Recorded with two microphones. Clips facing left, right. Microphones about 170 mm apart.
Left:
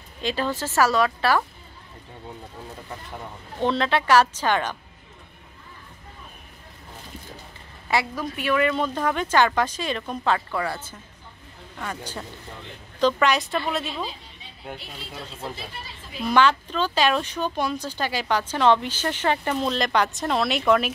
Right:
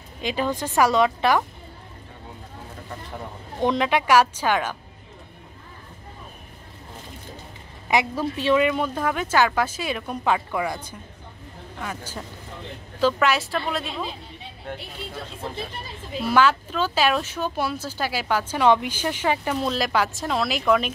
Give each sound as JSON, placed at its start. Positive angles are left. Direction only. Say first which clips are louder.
{"t": 0.2, "sound": "speech", "louder": "right 1 dB", "side_deg": -15}
{"t": 3.5, "sound": "speech", "louder": "right 1 dB", "side_deg": -15}
{"t": 7.9, "sound": "a woman's voice", "louder": "right 3 dB", "side_deg": -25}
{"t": 8.6, "sound": "speech", "louder": "even", "side_deg": -10}
{"t": 16.3, "sound": "speech", "louder": "even", "side_deg": -5}